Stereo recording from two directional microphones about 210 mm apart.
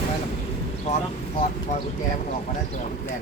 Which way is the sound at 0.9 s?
30° left (ahead or behind).